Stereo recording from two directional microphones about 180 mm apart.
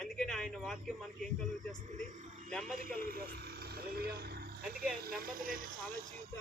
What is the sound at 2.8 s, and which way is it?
A man's voice, 50° right (ahead or behind).